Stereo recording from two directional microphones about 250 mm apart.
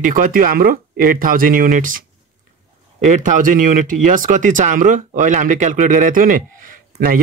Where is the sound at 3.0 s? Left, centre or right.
Right.